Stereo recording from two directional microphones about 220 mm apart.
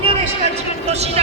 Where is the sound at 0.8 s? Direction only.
30° right (ahead or behind).